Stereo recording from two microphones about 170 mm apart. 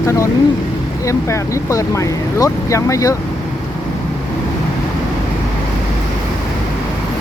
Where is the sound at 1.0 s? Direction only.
20° left (ahead or behind).